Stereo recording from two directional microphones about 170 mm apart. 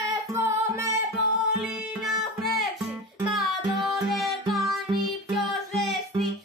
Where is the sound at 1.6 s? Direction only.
5° right (ahead or behind).